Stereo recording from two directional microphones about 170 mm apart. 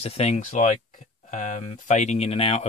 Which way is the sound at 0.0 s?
40° left (ahead or behind).